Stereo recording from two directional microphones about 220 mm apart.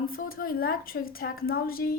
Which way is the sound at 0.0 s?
40° left (ahead or behind).